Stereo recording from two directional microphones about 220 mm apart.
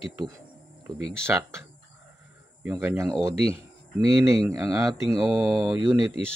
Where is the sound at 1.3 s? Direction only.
10° right (ahead or behind).